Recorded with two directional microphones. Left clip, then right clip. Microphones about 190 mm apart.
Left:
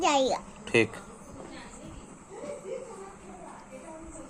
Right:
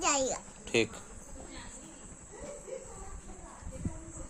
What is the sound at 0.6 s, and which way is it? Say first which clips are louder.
Insect: left 5 dB; 10° right (ahead or behind).